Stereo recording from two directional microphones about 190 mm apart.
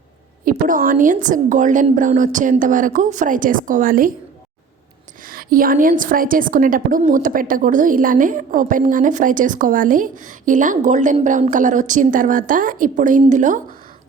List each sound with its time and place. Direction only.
0.4 s a woman's voice: 45° right (ahead or behind)
5.2 s a woman's voice: 50° right (ahead or behind)